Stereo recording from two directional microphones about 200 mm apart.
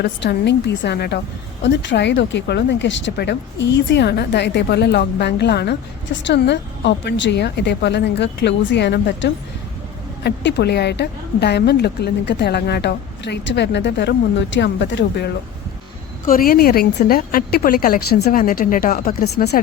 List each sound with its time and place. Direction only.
0.0 s a woman's voice: 55° left (ahead or behind)
16.2 s a woman's voice: 45° left (ahead or behind)